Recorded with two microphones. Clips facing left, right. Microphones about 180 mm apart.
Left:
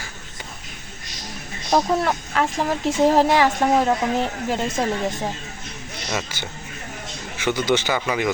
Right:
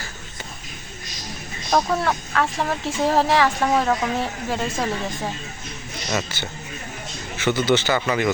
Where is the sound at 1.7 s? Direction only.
15° left (ahead or behind).